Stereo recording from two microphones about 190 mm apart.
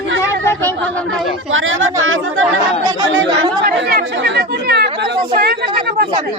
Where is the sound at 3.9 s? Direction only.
50° right (ahead or behind).